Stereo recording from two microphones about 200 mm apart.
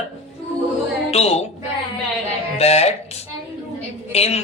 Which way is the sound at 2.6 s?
30° left (ahead or behind).